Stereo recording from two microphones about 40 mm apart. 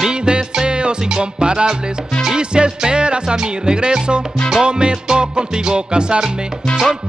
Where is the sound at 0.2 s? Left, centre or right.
Right.